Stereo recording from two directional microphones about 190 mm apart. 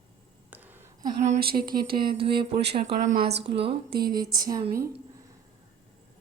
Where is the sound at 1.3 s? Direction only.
50° right (ahead or behind).